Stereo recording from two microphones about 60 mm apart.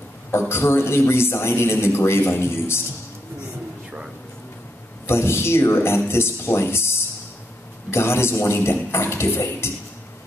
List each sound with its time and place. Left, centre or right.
0.3 s a man's voice: left
5.0 s a man's voice: left